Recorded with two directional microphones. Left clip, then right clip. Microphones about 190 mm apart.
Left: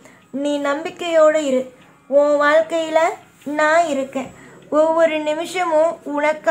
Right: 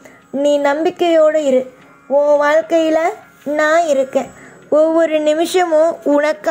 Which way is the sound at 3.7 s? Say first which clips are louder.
Right 4 dB; 35° right (ahead or behind).